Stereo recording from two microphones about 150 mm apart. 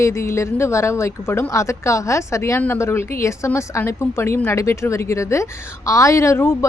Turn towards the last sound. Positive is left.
turn(degrees=15)  # may be behind; listen again after turning